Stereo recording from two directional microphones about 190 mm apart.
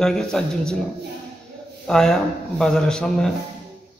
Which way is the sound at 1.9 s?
5° left (ahead or behind).